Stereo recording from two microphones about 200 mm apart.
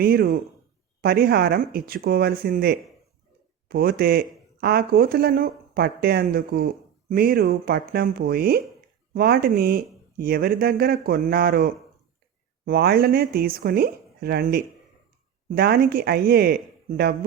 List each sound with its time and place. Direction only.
0.0 s speech: 45° right (ahead or behind)